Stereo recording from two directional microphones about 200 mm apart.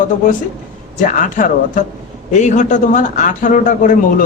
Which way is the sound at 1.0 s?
40° left (ahead or behind).